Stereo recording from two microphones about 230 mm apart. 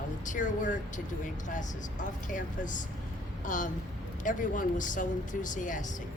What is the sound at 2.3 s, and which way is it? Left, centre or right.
Speech, left.